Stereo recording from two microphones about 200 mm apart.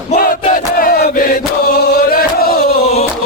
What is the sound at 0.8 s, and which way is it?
Chant, 45° left (ahead or behind).